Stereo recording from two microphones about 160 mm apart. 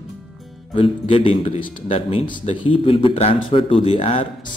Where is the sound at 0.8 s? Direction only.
35° left (ahead or behind).